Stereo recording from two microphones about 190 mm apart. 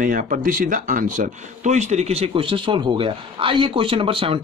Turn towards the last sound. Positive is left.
turn(degrees=-30)  # may be behind; listen again after turning